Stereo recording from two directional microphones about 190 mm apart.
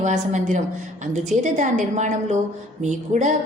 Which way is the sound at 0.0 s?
40° right (ahead or behind).